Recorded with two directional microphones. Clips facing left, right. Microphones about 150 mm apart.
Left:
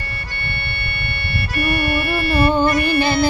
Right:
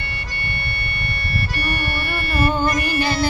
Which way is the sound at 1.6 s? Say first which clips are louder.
Left 10 dB; 45° left (ahead or behind).